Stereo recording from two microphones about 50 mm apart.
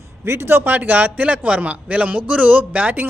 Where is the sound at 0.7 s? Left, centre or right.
Right.